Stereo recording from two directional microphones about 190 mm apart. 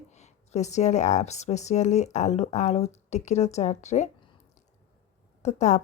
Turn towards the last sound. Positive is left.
turn(degrees=40)  # may be behind; listen again after turning